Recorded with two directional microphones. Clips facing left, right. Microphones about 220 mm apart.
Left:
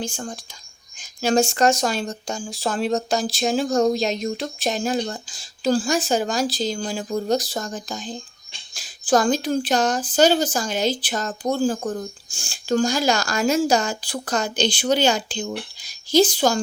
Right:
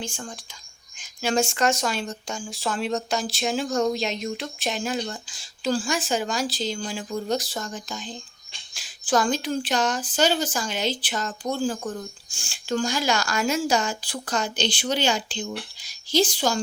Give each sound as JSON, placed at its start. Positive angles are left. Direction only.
{"t": 0.0, "sound": "speech", "side_deg": 40}